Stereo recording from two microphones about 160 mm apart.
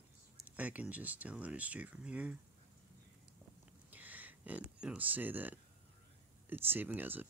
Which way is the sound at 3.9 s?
10° right (ahead or behind).